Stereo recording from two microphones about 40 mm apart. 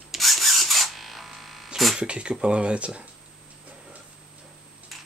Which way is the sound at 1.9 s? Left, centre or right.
Right.